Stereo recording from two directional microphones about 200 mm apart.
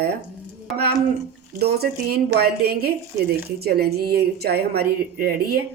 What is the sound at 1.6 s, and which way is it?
Speech, 50° right (ahead or behind).